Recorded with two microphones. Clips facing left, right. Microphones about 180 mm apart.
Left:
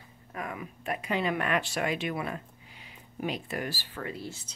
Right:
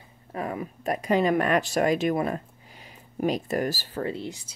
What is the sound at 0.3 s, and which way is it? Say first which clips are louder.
Speech: right 6 dB; 35° right (ahead or behind).